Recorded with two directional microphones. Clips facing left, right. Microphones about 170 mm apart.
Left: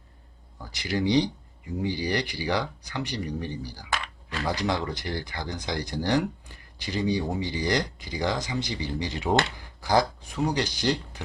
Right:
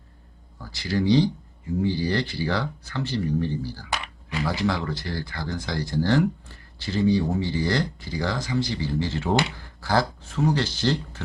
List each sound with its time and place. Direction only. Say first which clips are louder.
0.6 s speech: right 2 dB; 20° left (ahead or behind)
3.8 s a sound: right 1 dB; 15° right (ahead or behind)
4.4 s speech: right 1 dB; 20° left (ahead or behind)